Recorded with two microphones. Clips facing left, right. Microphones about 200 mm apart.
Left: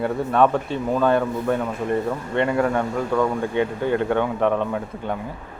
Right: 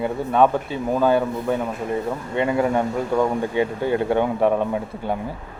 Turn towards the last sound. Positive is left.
turn(degrees=-10)  # may be behind; listen again after turning